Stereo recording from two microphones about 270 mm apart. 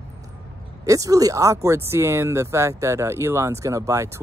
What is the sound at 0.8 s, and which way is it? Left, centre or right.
Speech, centre.